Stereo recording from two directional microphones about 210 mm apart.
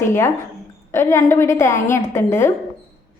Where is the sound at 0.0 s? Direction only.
10° left (ahead or behind).